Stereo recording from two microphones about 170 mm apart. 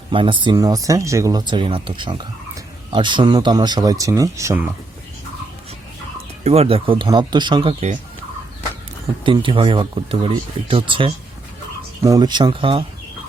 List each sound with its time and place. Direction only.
0.1 s speech: 30° right (ahead or behind); by 4.7 s 15° right (ahead or behind)
6.4 s speech: 35° right (ahead or behind)
9.2 s speech: 30° right (ahead or behind)